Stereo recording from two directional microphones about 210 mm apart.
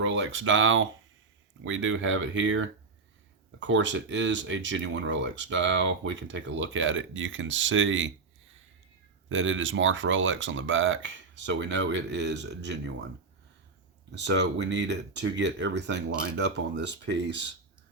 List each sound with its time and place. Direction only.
0.0 s speech: 60° right (ahead or behind)
9.3 s speech: 65° right (ahead or behind)
14.1 s speech: 55° right (ahead or behind)